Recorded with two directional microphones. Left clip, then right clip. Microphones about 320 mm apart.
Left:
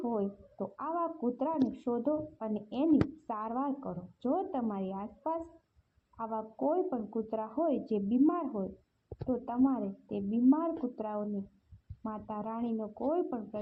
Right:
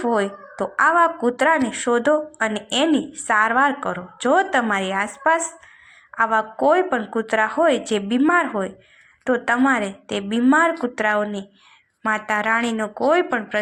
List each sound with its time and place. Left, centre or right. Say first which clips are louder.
0.0 s a woman's voice: right 14 dB; right